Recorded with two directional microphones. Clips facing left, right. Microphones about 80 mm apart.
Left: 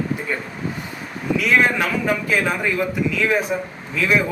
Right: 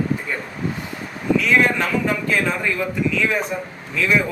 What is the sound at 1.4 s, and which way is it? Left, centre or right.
A man's voice, centre.